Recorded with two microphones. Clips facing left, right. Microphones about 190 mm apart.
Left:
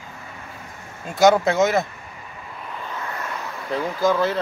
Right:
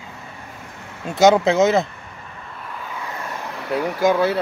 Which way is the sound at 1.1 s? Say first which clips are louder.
Right 2 dB; 20° right (ahead or behind).